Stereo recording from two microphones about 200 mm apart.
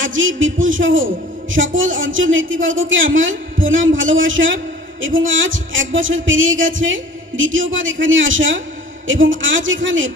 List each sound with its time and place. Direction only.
0.0 s a man's voice: 75° right (ahead or behind)